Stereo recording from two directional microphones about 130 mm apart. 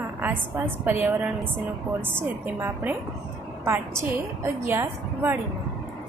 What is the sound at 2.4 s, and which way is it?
A woman's voice, 15° right (ahead or behind).